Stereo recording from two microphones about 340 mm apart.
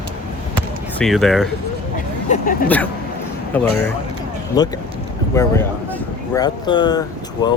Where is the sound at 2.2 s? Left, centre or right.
Left.